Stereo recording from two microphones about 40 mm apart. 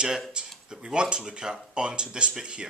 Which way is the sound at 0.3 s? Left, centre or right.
Centre.